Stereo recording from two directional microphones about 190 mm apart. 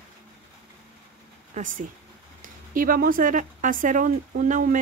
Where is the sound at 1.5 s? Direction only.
45° right (ahead or behind).